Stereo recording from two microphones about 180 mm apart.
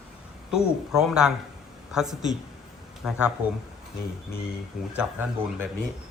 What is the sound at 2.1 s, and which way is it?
Speech, 40° right (ahead or behind).